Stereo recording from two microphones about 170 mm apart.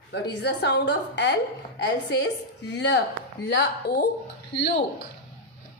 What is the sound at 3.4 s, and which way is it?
Speech, 75° left (ahead or behind).